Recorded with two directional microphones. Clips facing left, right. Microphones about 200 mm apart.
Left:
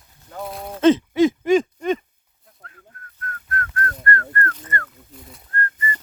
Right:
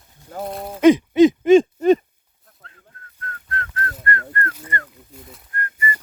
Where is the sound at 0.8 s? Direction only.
15° right (ahead or behind).